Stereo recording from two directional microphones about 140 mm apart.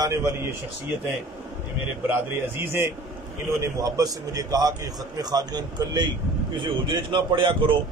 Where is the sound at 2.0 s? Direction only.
15° right (ahead or behind).